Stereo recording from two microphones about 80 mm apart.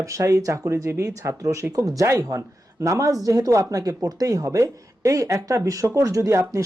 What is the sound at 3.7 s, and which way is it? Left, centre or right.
Speech, right.